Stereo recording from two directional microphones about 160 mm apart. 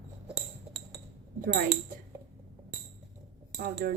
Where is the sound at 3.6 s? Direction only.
75° right (ahead or behind).